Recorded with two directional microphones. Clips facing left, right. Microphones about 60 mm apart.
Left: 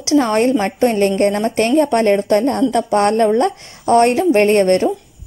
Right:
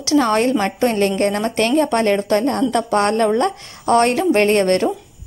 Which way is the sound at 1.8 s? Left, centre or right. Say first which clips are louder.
Left 4 dB; centre.